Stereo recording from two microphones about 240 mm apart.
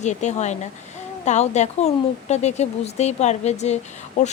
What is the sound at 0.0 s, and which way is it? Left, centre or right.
A woman's voice, left.